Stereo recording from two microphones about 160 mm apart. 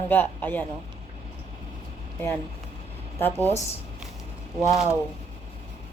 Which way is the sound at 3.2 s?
15° left (ahead or behind).